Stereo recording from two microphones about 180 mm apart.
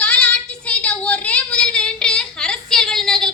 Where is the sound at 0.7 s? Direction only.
5° left (ahead or behind).